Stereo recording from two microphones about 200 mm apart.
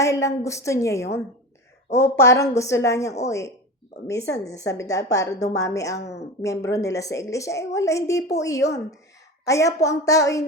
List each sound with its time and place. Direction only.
0.0 s a woman's voice: 15° left (ahead or behind)